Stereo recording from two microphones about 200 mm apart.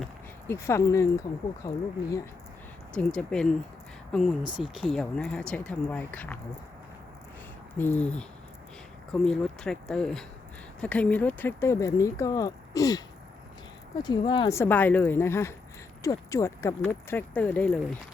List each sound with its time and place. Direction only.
0.4 s speech: 15° left (ahead or behind)
2.9 s speech: 5° left (ahead or behind)
7.8 s speech: 10° left (ahead or behind)
14.0 s speech: 20° left (ahead or behind)